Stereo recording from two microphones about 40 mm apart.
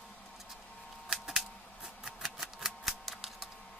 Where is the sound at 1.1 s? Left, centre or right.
Centre.